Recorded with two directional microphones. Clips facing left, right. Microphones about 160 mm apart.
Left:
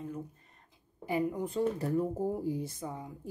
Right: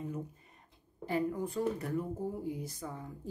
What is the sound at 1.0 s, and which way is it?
Speech, 15° left (ahead or behind).